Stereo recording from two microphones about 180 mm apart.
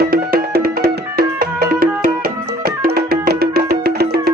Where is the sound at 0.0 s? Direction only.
55° right (ahead or behind).